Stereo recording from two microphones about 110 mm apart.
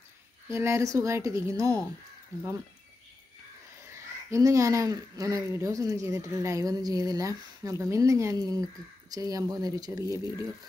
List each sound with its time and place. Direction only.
0.5 s a woman's voice: 25° right (ahead or behind)
3.9 s speech: 30° right (ahead or behind)